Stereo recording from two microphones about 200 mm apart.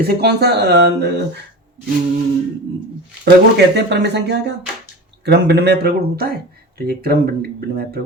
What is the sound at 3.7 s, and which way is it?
A man's voice, 60° right (ahead or behind).